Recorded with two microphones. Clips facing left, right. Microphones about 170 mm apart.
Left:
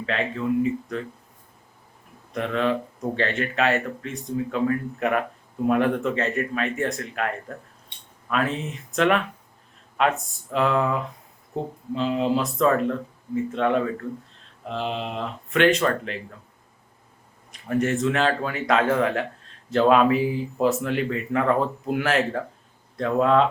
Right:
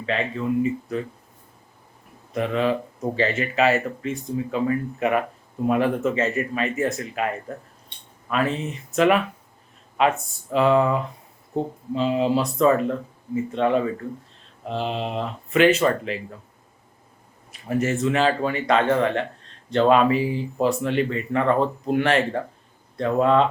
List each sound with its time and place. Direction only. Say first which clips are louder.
0.0 s speech: right 1 dB; centre (ahead or behind)
2.3 s speech: right 2 dB; 5° right (ahead or behind)
17.5 s speech: even; 5° right (ahead or behind)